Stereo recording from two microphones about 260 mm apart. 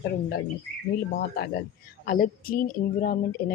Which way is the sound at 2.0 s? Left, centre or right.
Left.